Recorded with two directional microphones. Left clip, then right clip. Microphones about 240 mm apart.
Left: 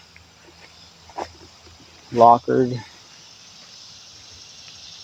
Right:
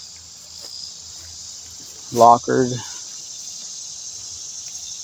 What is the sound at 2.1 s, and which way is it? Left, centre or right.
Cricket, centre.